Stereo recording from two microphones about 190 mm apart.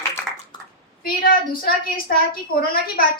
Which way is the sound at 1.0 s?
50° left (ahead or behind).